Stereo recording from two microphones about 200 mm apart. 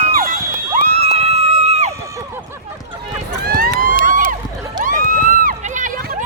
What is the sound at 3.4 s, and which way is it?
Vehicle, 50° right (ahead or behind).